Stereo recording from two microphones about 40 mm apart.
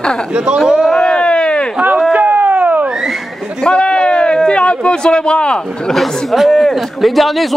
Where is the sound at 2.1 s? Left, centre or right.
Right.